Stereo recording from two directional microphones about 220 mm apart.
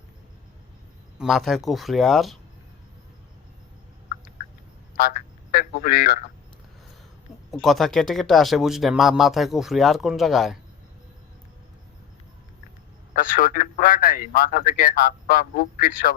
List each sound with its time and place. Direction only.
1.2 s speech: centre (ahead or behind)
4.9 s a sound: 40° left (ahead or behind)
7.5 s speech: centre (ahead or behind)
13.1 s a man's voice: 40° left (ahead or behind)